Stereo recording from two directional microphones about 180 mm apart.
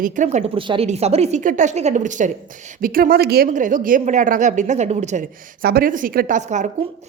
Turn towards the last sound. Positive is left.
turn(degrees=-45)  # may be behind; listen again after turning